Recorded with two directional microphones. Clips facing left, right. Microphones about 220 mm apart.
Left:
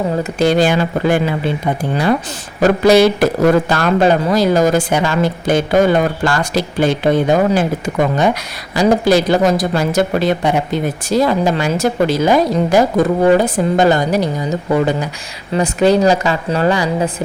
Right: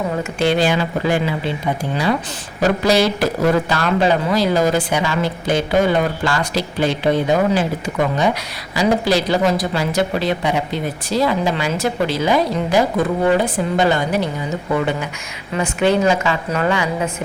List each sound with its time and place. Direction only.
0.2 s a man's voice: 40° left (ahead or behind)
2.6 s a man's voice: 55° left (ahead or behind); by 14.3 s 40° left (ahead or behind)
15.5 s a woman's voice: 40° left (ahead or behind)